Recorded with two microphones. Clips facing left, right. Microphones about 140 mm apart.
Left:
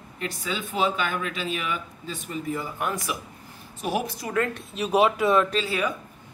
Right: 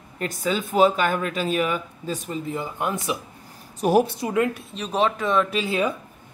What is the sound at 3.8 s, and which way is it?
Speech, 40° right (ahead or behind).